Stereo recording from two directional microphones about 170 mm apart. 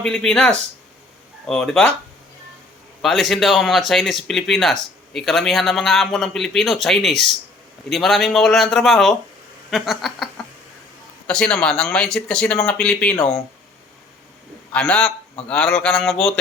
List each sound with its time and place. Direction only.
0.0 s speech: 5° left (ahead or behind)
3.0 s speech: centre (ahead or behind)
9.6 s a sound: centre (ahead or behind)
11.3 s speech: 5° left (ahead or behind)
14.7 s a man's voice: 5° left (ahead or behind)